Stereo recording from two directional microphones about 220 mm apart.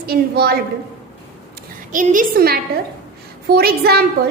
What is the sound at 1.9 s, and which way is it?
A woman's voice, 35° right (ahead or behind).